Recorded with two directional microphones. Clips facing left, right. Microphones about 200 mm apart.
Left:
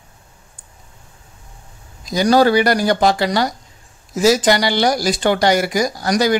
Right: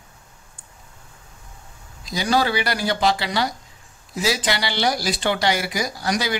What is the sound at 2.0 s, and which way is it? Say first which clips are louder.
Speech: left 8 dB; 45° left (ahead or behind).